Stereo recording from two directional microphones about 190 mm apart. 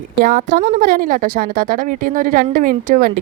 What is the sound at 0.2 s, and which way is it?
A woman's voice, 45° right (ahead or behind).